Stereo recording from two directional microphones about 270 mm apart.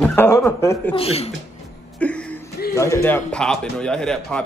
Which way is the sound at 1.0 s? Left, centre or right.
Left.